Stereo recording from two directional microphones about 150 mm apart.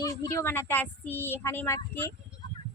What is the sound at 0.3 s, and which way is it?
Speech, 15° left (ahead or behind).